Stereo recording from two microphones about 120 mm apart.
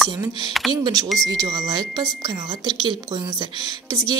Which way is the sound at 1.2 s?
30° right (ahead or behind).